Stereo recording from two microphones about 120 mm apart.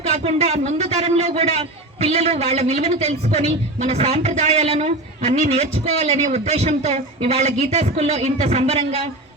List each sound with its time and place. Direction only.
0.2 s a man's voice: 60° right (ahead or behind)